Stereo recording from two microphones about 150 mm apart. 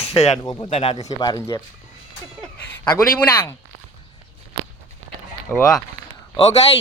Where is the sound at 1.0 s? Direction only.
25° left (ahead or behind).